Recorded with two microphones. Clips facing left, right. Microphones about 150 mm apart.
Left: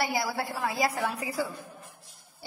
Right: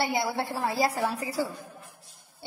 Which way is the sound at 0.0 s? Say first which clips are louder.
Right 2 dB; 25° right (ahead or behind).